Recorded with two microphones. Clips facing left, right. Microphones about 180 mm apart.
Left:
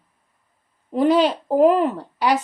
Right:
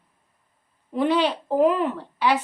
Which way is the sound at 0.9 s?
40° left (ahead or behind).